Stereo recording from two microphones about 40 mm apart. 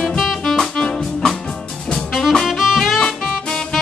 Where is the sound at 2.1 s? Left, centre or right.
Centre.